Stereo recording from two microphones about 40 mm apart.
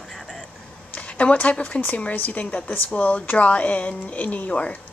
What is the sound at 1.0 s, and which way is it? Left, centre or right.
Speech, left.